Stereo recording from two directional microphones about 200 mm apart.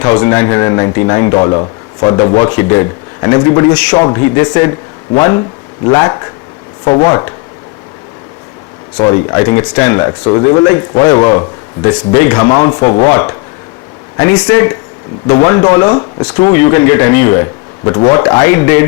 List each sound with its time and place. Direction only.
0.0 s speech: 15° left (ahead or behind)
9.0 s speech: 15° left (ahead or behind)